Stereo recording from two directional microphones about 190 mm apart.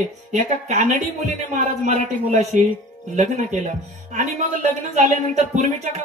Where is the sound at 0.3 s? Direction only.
40° right (ahead or behind).